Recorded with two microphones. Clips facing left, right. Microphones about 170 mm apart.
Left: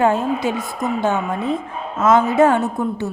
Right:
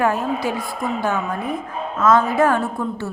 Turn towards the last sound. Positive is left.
turn(degrees=20)  # may be behind; listen again after turning